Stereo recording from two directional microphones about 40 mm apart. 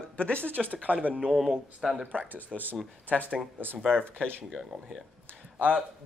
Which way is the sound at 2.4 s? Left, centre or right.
Right.